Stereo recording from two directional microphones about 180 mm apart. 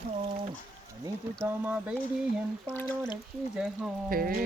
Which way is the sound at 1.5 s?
10° right (ahead or behind).